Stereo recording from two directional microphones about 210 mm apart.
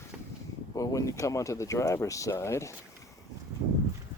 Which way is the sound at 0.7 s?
15° left (ahead or behind).